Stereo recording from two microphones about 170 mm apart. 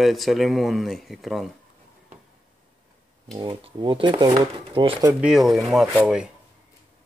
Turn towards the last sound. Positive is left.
turn(degrees=-5)  # may be behind; listen again after turning